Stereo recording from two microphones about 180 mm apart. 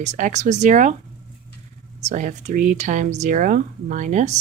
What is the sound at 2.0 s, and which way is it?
Speech, 40° right (ahead or behind).